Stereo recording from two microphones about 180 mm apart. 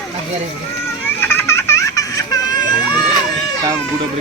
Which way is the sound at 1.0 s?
10° left (ahead or behind).